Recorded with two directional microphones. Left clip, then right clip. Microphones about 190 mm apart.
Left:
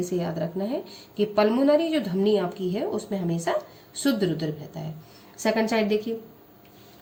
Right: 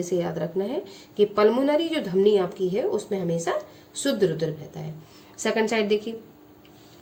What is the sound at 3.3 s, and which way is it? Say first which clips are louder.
Speech: left 2 dB; 10° right (ahead or behind).